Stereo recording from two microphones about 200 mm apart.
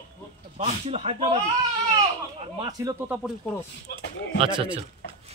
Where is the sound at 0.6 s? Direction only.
30° right (ahead or behind).